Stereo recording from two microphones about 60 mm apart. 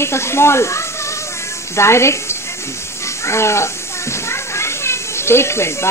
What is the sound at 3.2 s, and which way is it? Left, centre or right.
Speech, left.